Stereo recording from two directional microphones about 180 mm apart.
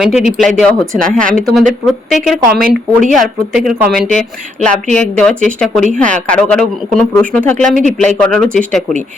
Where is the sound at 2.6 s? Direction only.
55° right (ahead or behind).